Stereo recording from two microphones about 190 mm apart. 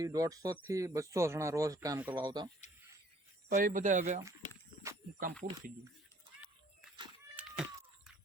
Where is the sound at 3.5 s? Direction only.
45° right (ahead or behind).